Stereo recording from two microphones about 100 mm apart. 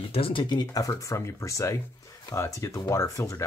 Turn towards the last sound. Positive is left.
turn(degrees=30)  # may be behind; listen again after turning